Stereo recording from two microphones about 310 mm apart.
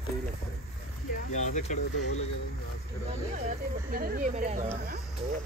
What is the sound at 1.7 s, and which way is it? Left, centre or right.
Speech, left.